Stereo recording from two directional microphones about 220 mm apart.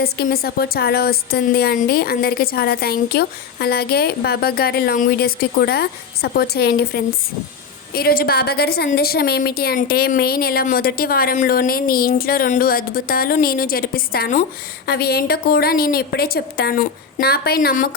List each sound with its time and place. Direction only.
0.0 s a woman's voice: 45° left (ahead or behind)